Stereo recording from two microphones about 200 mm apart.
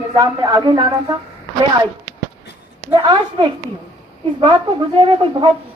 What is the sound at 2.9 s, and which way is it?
Speech, 25° right (ahead or behind).